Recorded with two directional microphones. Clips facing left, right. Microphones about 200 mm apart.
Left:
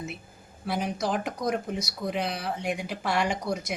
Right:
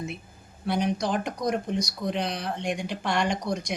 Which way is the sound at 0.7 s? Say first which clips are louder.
Right 2 dB; centre (ahead or behind).